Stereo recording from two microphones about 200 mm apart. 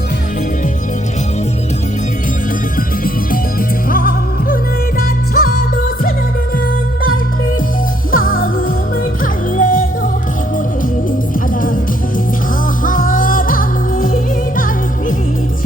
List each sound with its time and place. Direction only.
3.0 s music: 45° left (ahead or behind)
8.1 s music: 45° left (ahead or behind)
11.3 s music: 45° left (ahead or behind)
12.8 s music: 40° left (ahead or behind)